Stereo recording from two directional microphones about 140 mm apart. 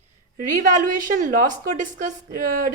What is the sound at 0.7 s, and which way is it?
A woman's voice, 70° right (ahead or behind).